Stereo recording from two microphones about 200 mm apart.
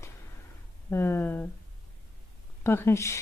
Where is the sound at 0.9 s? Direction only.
10° left (ahead or behind).